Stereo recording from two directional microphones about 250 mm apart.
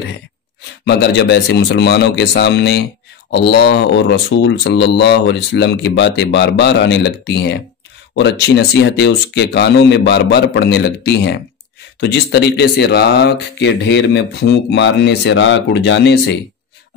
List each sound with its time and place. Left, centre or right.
0.8 s speech: left